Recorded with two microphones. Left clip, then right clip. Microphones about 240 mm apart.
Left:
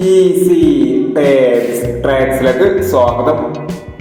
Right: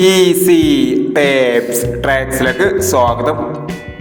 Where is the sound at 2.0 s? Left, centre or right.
Right.